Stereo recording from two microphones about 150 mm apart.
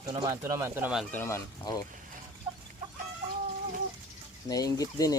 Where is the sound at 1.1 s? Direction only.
15° left (ahead or behind).